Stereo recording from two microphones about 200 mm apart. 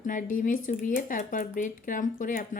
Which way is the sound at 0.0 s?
40° left (ahead or behind).